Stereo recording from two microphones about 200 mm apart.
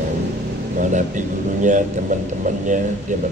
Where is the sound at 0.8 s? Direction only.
40° right (ahead or behind).